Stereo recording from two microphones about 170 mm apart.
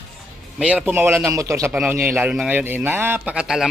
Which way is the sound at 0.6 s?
10° right (ahead or behind).